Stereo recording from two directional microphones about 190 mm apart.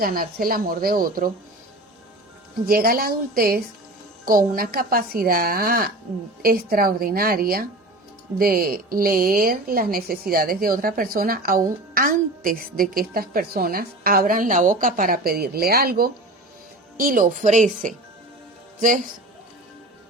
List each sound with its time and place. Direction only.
0.0 s a woman's voice: 50° right (ahead or behind)
2.6 s a woman's voice: 50° right (ahead or behind)